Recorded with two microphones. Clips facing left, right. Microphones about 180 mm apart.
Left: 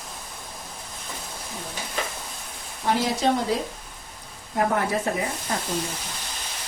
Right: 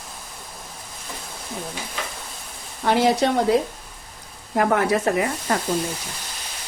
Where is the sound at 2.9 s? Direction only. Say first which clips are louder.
Right 4 dB; 65° right (ahead or behind).